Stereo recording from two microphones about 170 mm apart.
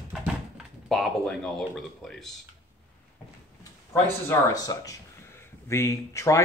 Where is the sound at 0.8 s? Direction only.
Centre (ahead or behind).